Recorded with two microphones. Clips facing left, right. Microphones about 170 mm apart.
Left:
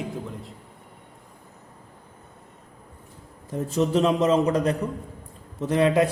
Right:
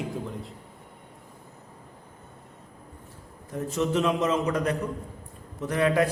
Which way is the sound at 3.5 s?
35° left (ahead or behind).